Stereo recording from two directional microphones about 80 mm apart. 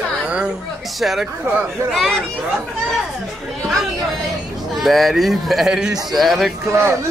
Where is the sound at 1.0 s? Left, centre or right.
Centre.